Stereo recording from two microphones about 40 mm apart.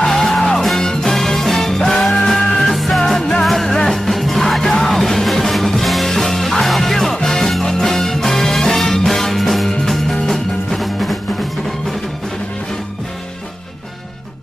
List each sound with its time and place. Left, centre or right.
0.0 s music: centre
3.1 s music: centre
3.4 s music: centre